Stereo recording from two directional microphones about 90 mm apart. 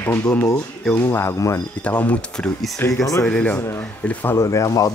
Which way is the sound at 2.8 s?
35° left (ahead or behind).